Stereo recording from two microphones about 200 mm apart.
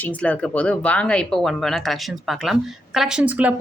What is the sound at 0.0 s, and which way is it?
Speech, 5° left (ahead or behind).